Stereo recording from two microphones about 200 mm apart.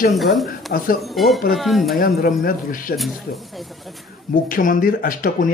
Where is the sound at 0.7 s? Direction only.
45° left (ahead or behind).